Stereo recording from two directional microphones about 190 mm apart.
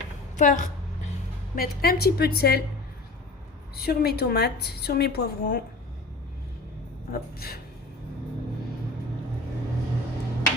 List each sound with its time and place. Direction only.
0.3 s a woman's voice: 40° left (ahead or behind)
1.5 s a woman's voice: 50° left (ahead or behind)
3.8 s a woman's voice: 55° left (ahead or behind)
7.1 s speech: 55° left (ahead or behind)